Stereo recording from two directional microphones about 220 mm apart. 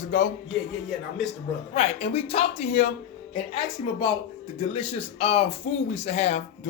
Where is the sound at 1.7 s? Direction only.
30° left (ahead or behind).